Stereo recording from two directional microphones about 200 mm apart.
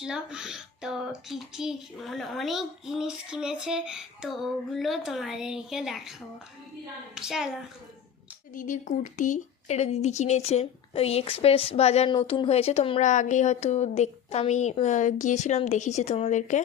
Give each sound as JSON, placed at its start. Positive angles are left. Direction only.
{"t": 0.0, "sound": "speech", "side_deg": -5}
{"t": 7.2, "sound": "speech", "side_deg": 0}
{"t": 8.5, "sound": "a woman's voice", "side_deg": 40}